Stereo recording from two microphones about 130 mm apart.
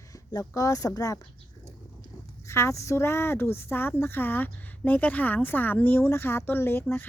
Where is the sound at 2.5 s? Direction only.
20° left (ahead or behind).